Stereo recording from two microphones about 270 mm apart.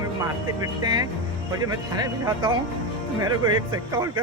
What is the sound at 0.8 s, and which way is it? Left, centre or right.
Speech, centre.